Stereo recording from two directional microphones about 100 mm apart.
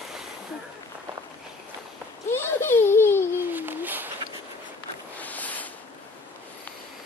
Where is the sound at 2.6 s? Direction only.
25° left (ahead or behind).